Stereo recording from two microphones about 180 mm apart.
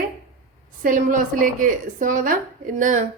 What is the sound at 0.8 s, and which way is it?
A woman's voice, 45° right (ahead or behind).